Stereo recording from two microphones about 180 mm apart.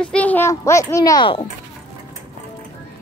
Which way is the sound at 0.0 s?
5° left (ahead or behind).